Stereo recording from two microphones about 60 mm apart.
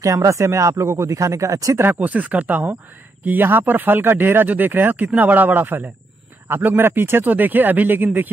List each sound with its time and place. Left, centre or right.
0.0 s speech: right
1.8 s speech: right